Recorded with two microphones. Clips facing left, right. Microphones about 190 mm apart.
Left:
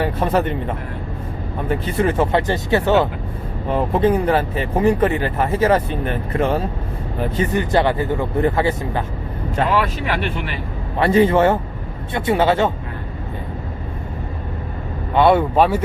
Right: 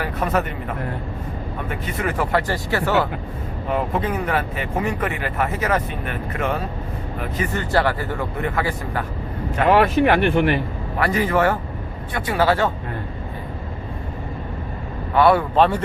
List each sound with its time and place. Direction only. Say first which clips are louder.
0.0 s speech: left 4 dB; 30° left (ahead or behind)
3.7 s speech: left 6 dB; 30° left (ahead or behind)
7.5 s speech: left 2 dB; 20° left (ahead or behind)
9.7 s speech: right 5 dB; 55° right (ahead or behind)
10.9 s speech: left 6 dB; 25° left (ahead or behind)
15.1 s speech: left 2 dB; 20° left (ahead or behind)
15.5 s speech: left 1 dB; 10° left (ahead or behind)